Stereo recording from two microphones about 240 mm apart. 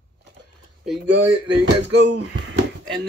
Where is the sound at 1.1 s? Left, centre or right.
Right.